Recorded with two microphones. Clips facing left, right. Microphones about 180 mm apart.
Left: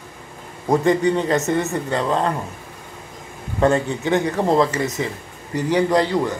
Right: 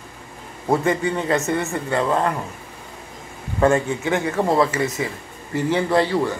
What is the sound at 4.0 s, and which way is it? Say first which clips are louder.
A man's voice: left 2 dB; 20° left (ahead or behind).